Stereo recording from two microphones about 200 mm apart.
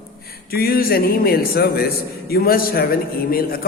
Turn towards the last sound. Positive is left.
turn(degrees=45)  # may be behind; listen again after turning